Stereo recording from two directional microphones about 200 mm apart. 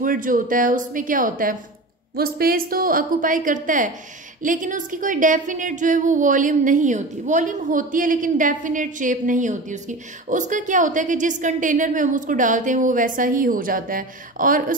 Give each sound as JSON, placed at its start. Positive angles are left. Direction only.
{"t": 0.0, "sound": "a woman's voice", "side_deg": -45}